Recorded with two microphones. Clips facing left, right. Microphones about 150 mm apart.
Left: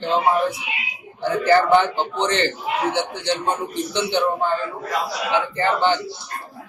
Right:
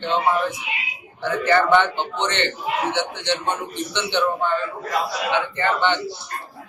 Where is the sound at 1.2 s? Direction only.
35° left (ahead or behind).